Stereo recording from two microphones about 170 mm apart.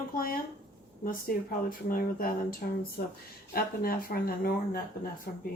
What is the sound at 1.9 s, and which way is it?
Speech, 60° left (ahead or behind).